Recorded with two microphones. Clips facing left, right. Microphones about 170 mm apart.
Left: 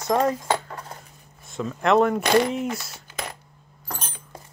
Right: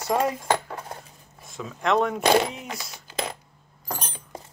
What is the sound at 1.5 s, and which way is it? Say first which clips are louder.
Speech: left 4 dB; centre (ahead or behind).